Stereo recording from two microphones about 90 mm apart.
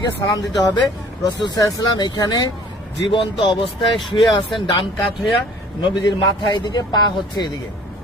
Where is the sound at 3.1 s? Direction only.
70° left (ahead or behind).